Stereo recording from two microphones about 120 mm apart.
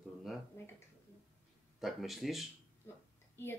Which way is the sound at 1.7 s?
Centre (ahead or behind).